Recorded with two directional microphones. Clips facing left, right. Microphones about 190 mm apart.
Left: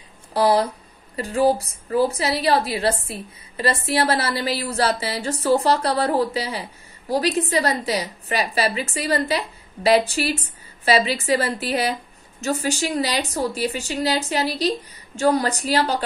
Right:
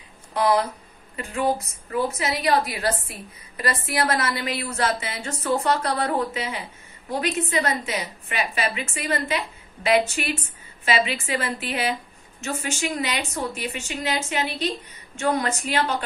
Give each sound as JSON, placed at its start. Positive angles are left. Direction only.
{"t": 0.3, "sound": "a woman's voice", "side_deg": 30}